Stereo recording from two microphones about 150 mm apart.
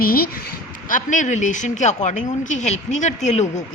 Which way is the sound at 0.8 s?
60° left (ahead or behind).